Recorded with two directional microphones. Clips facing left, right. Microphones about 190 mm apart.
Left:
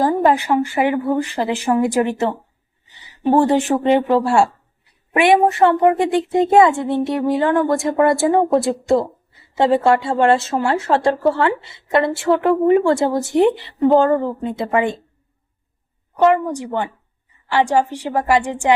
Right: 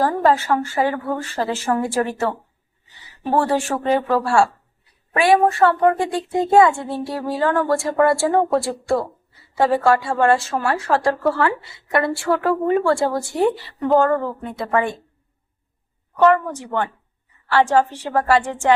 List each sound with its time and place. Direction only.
0.0 s a woman's voice: 15° left (ahead or behind)
16.1 s speech: 15° left (ahead or behind)